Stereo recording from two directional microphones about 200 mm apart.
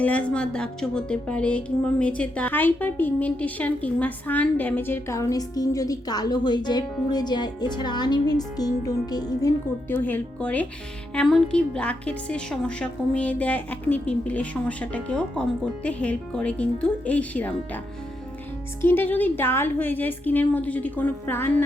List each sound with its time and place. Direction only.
0.0 s speech: 5° left (ahead or behind)
18.8 s speech: 10° left (ahead or behind)